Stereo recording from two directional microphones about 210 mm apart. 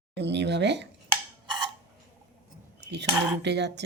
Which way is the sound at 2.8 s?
55° right (ahead or behind).